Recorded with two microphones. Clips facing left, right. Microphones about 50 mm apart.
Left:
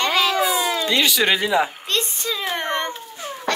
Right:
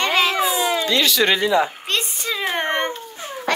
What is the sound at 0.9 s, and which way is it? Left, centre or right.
Speech, centre.